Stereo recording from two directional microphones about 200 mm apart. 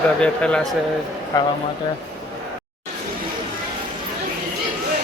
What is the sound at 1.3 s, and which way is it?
Speech, 20° left (ahead or behind).